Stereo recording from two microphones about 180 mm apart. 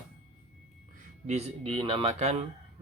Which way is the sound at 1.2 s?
35° right (ahead or behind).